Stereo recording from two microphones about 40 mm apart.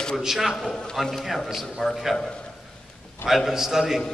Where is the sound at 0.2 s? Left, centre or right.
Centre.